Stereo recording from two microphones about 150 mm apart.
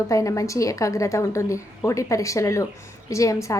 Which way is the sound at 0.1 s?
20° left (ahead or behind).